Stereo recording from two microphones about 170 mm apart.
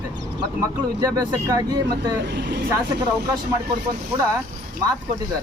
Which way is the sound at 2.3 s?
90° right.